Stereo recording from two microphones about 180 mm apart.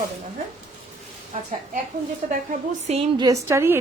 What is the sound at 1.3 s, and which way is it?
Speech, 45° right (ahead or behind).